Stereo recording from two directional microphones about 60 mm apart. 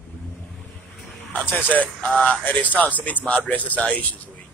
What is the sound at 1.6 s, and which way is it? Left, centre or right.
Speech, left.